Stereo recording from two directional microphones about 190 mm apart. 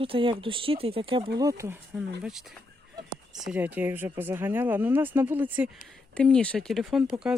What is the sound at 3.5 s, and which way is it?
Speech, 10° right (ahead or behind).